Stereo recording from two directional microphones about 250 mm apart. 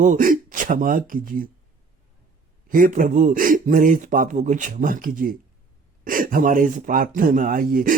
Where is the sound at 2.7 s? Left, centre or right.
Right.